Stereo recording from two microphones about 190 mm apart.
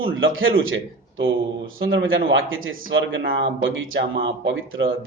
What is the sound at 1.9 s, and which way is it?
A man's voice, 85° right.